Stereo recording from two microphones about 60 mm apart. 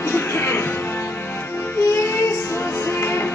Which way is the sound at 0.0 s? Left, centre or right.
Left.